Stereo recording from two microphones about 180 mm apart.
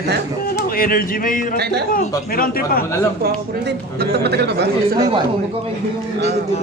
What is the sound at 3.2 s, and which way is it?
Speech, 60° right (ahead or behind).